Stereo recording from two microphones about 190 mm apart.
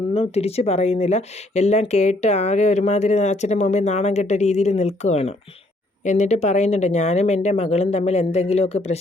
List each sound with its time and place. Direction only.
0.1 s speech: 30° left (ahead or behind)